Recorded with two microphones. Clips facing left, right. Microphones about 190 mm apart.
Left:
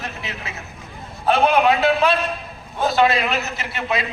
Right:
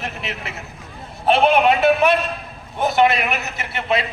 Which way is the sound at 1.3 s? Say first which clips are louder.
Right 1 dB; 25° right (ahead or behind).